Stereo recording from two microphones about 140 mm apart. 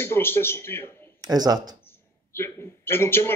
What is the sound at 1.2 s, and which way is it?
Speech, 30° right (ahead or behind).